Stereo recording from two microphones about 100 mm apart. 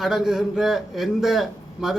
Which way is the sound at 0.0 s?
5° right (ahead or behind).